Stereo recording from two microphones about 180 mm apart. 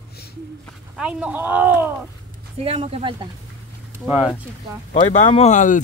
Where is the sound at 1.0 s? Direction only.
5° right (ahead or behind).